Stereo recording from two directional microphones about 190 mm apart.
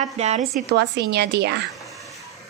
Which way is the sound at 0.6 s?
60° right (ahead or behind).